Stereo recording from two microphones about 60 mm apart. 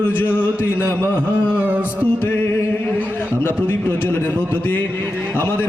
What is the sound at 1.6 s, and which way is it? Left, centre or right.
Music, right.